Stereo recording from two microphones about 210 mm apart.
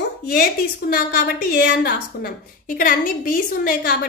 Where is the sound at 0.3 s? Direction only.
45° left (ahead or behind).